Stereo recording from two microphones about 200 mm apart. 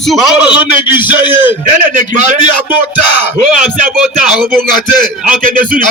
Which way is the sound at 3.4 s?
40° right (ahead or behind).